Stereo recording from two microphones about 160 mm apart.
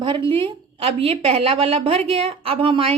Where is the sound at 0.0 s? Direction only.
30° right (ahead or behind).